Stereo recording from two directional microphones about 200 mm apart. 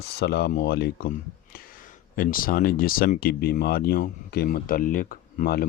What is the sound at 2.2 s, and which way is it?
Speech, 45° left (ahead or behind).